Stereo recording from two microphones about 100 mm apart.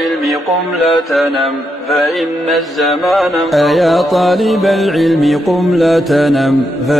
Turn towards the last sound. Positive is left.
turn(degrees=0)  # may be behind; listen again after turning